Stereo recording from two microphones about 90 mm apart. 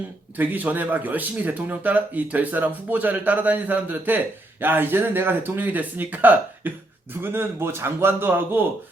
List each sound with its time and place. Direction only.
0.3 s speech: 20° right (ahead or behind)